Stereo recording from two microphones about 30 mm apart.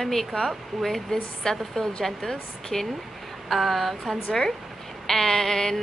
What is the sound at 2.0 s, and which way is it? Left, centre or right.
Speech, centre.